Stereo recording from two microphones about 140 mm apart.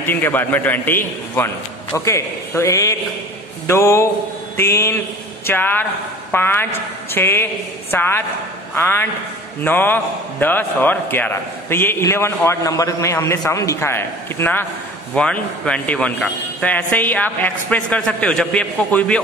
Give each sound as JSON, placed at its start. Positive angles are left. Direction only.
{"t": 0.0, "sound": "a man's voice", "side_deg": 15}